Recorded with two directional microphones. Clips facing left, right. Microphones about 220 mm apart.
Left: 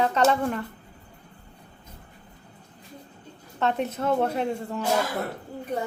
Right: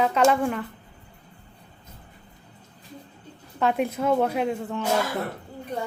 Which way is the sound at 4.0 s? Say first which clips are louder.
Right 1 dB; 5° right (ahead or behind).